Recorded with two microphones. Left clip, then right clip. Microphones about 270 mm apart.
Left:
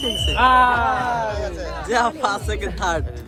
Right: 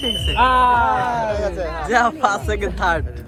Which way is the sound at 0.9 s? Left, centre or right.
Right.